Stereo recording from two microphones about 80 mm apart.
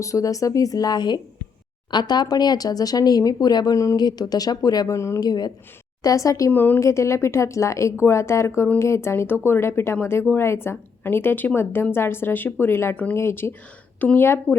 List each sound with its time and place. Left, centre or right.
0.0 s speech: left
4.9 s speech: left
5.2 s speech: left
6.0 s speech: left
6.5 s speech: left
6.7 s speech: left